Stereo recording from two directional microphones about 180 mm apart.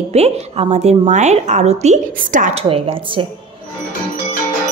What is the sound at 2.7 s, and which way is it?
Speech, 30° right (ahead or behind).